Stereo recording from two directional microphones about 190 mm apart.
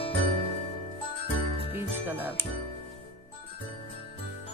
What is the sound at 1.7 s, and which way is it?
Music, 10° right (ahead or behind).